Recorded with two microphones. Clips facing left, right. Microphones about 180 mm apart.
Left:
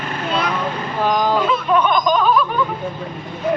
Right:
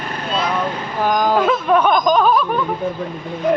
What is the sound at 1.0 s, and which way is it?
Speech, 10° right (ahead or behind).